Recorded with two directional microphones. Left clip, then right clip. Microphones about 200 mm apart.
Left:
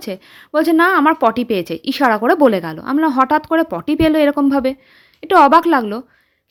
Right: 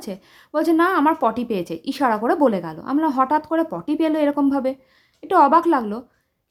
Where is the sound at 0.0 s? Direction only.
15° left (ahead or behind).